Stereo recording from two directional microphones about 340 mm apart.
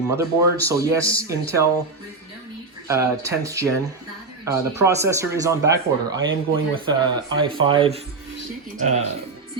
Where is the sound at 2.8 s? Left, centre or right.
Centre.